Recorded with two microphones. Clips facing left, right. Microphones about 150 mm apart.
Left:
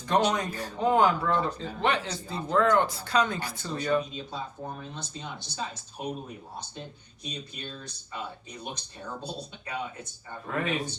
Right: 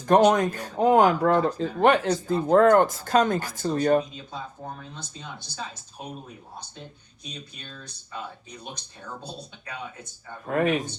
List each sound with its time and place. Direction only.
0.0 s speech: 45° right (ahead or behind)
10.4 s speech: 50° right (ahead or behind)